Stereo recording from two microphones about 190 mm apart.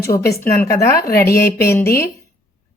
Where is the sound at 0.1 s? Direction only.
30° left (ahead or behind).